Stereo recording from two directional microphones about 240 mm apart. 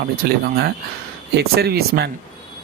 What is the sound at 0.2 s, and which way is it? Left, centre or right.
Speech, right.